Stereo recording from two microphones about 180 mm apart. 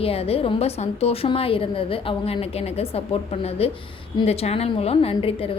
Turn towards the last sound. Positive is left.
turn(degrees=30)  # may be behind; listen again after turning